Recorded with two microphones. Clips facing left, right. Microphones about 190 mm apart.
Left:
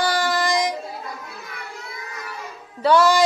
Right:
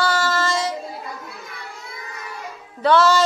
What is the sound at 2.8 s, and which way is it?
Speech, 10° left (ahead or behind).